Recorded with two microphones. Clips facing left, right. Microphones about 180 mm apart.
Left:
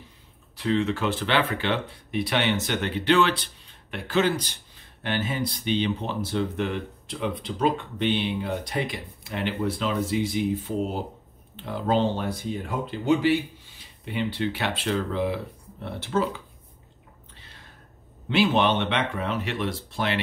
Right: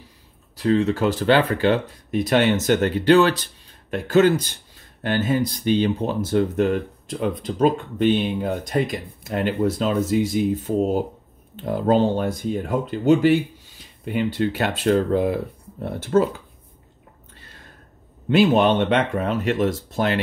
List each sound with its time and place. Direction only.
0.6 s speech: 40° right (ahead or behind)
18.3 s speech: 45° right (ahead or behind)